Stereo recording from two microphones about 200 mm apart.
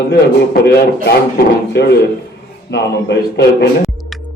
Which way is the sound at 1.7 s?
55° left (ahead or behind).